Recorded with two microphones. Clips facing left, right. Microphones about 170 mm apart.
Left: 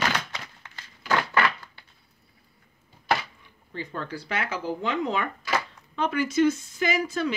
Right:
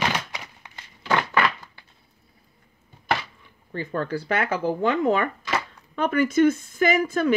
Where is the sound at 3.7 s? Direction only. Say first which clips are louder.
Right 7 dB; 45° right (ahead or behind).